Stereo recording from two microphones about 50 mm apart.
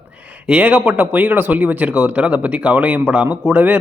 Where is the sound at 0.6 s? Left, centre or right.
Right.